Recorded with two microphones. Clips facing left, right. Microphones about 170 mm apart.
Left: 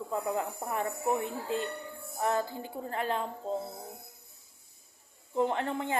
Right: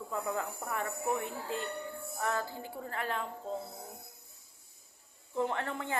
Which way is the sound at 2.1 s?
25° left (ahead or behind).